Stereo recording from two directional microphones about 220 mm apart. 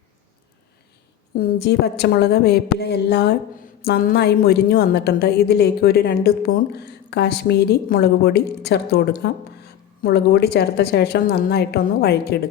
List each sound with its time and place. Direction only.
1.4 s a woman's voice: 45° left (ahead or behind)